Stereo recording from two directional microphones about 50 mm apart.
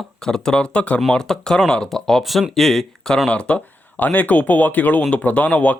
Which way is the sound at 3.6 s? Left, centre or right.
Left.